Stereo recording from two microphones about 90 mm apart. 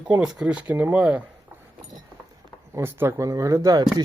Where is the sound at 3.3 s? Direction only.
35° right (ahead or behind).